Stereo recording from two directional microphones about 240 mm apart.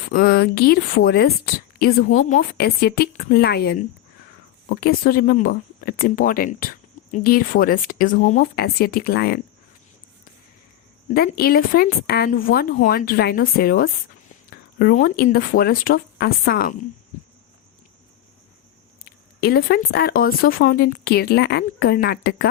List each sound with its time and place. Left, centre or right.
0.1 s speech: left
11.1 s speech: left
19.0 s speech: left